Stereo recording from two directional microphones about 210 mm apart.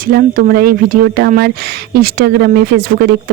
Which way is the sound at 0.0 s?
40° right (ahead or behind).